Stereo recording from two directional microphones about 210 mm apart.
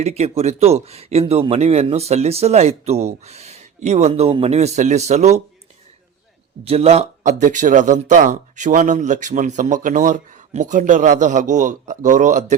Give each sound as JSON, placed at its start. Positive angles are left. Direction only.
{"t": 0.0, "sound": "speech", "side_deg": -30}
{"t": 6.7, "sound": "speech", "side_deg": -30}